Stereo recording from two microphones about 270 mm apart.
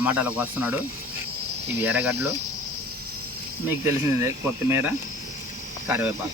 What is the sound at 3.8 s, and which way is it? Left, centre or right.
Speech, centre.